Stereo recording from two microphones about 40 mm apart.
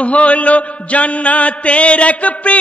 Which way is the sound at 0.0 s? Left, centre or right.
Left.